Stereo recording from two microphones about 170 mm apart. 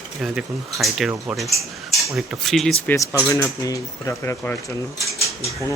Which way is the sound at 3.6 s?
20° left (ahead or behind).